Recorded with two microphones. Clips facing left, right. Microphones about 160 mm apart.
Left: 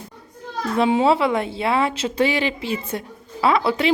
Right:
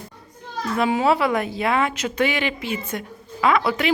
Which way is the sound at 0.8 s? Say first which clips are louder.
Left 2 dB; 25° left (ahead or behind).